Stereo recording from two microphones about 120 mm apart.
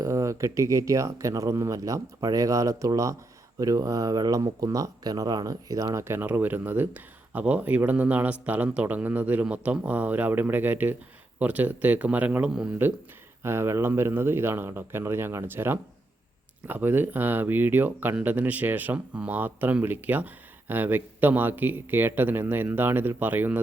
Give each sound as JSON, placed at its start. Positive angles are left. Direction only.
{"t": 0.0, "sound": "speech", "side_deg": -25}
{"t": 13.4, "sound": "speech", "side_deg": -20}